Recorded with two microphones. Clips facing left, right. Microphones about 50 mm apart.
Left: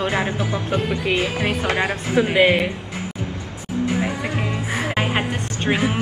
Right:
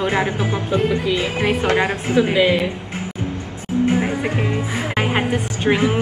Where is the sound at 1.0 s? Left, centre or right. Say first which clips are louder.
Right 1 dB; left.